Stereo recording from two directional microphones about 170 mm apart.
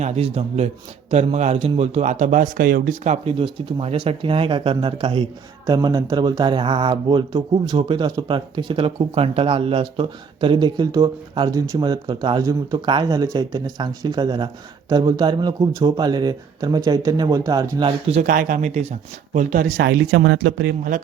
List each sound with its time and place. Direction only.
0.0 s a man's voice: 35° right (ahead or behind); by 17.8 s 20° right (ahead or behind)
18.2 s speech: 50° right (ahead or behind)
19.8 s speech: 85° right